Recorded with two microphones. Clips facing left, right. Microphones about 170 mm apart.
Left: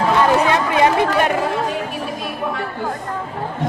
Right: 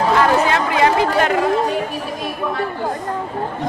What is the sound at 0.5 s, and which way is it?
Chatter, 20° left (ahead or behind).